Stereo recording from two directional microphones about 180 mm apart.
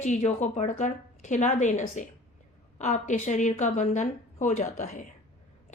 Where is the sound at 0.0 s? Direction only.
40° left (ahead or behind).